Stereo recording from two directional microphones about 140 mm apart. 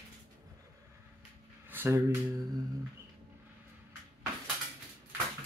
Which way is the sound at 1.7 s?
15° right (ahead or behind).